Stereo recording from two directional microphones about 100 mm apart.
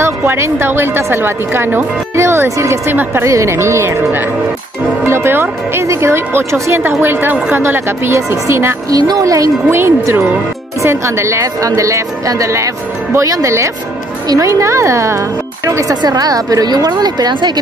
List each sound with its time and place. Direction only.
0.0 s a woman's voice: 25° right (ahead or behind)
8.9 s a woman's voice: 40° right (ahead or behind)
15.9 s a woman's voice: 40° right (ahead or behind)